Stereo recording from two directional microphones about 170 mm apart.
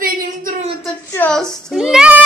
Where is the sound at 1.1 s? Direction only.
5° left (ahead or behind).